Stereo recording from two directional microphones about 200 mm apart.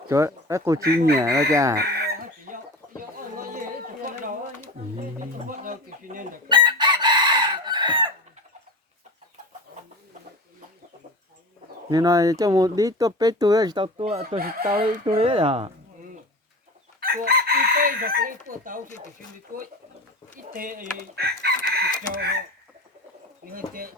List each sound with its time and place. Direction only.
0.1 s speech: 15° right (ahead or behind)
0.8 s chicken: 55° right (ahead or behind)
1.2 s speech: 15° right (ahead or behind)
1.8 s chicken: 50° right (ahead or behind)
3.2 s a sound: 45° right (ahead or behind)
5.5 s a sound: 40° right (ahead or behind)
6.5 s chicken: 25° right (ahead or behind)
11.9 s speech: 20° right (ahead or behind)
14.2 s chicken: 50° right (ahead or behind)
15.0 s speech: 25° right (ahead or behind)
17.0 s chicken: 50° right (ahead or behind)
20.5 s chicken: 45° right (ahead or behind)
23.5 s chicken: 45° right (ahead or behind)